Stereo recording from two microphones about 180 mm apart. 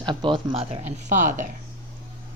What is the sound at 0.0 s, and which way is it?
A woman's voice, 25° right (ahead or behind).